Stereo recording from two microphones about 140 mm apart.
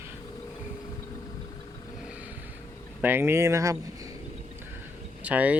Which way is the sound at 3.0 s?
15° right (ahead or behind).